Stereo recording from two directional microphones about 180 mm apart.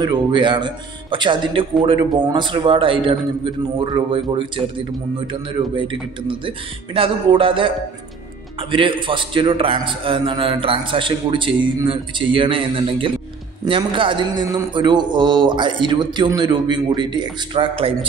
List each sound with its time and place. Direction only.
0.0 s speech: 25° right (ahead or behind)
8.7 s speech: 30° right (ahead or behind)